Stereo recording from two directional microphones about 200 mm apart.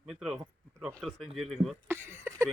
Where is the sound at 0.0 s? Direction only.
5° right (ahead or behind).